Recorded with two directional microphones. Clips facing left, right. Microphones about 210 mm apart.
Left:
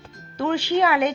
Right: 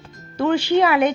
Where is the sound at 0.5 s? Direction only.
35° right (ahead or behind).